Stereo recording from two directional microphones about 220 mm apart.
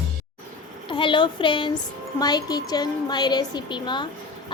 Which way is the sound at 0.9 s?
20° left (ahead or behind).